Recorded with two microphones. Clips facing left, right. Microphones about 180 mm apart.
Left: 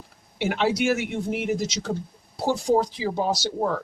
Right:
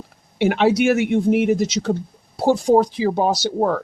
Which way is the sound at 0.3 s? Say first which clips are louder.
Right 7 dB; 65° right (ahead or behind).